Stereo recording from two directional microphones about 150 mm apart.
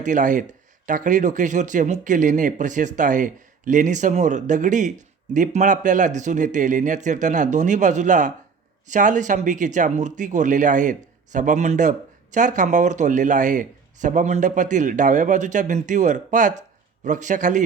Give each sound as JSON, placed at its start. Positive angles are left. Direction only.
{"t": 0.0, "sound": "speech", "side_deg": -60}